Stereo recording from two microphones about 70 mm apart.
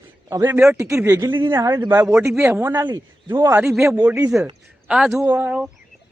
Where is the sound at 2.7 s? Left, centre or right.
Right.